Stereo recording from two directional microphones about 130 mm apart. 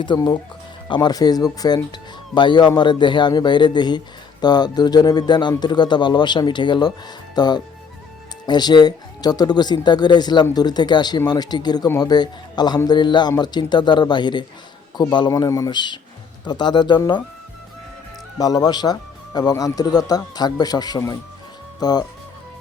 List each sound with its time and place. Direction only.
0.0 s speech: 35° left (ahead or behind)
18.3 s speech: 30° left (ahead or behind)